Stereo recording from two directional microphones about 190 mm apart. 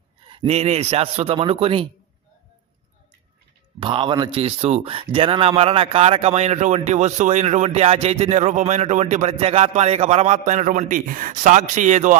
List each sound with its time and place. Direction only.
0.3 s speech: 30° right (ahead or behind)
3.8 s speech: 25° right (ahead or behind)